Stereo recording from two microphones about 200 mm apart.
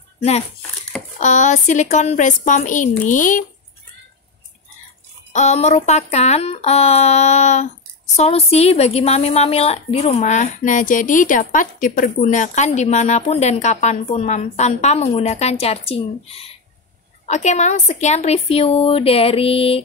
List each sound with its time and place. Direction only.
1.2 s a woman's voice: 35° left (ahead or behind)
5.3 s a woman's voice: 35° left (ahead or behind)